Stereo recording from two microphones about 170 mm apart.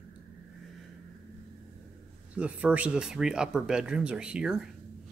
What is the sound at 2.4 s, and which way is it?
Speech, 5° right (ahead or behind).